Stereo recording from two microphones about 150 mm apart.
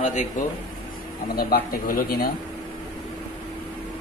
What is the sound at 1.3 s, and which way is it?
Speech, 90° left.